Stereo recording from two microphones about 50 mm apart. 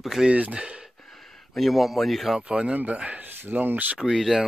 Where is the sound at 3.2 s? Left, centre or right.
Right.